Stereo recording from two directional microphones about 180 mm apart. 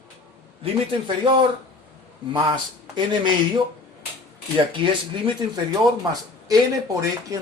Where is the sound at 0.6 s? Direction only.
25° right (ahead or behind).